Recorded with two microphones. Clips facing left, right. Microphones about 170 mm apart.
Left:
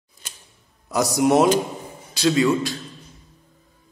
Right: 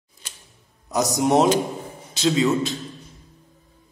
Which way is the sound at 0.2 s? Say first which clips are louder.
Left 1 dB; 50° left (ahead or behind).